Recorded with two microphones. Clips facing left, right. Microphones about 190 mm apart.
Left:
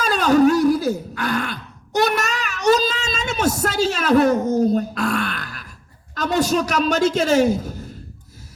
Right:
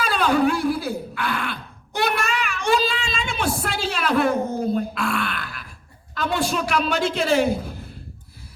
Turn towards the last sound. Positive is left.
turn(degrees=45)  # may be behind; listen again after turning